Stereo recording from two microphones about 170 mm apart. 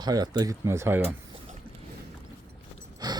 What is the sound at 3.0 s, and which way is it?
Gasp, 25° right (ahead or behind).